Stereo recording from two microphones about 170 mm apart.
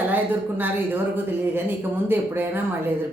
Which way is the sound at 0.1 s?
10° right (ahead or behind).